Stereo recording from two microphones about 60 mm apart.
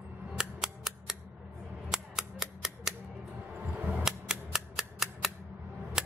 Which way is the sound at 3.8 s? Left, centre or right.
Right.